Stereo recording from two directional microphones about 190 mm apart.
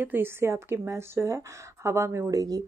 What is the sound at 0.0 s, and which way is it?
Speech, 10° right (ahead or behind).